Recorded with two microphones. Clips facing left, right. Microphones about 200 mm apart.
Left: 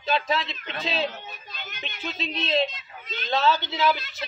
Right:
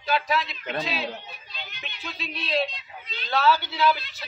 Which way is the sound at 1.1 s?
45° left (ahead or behind).